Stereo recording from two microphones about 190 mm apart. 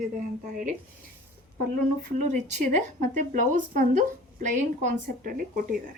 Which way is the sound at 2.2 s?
40° right (ahead or behind).